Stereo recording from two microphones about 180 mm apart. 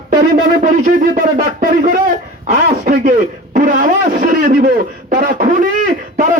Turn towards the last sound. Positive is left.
turn(degrees=-45)  # may be behind; listen again after turning